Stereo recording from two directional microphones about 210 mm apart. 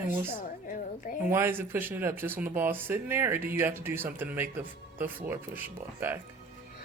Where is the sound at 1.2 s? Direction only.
10° right (ahead or behind).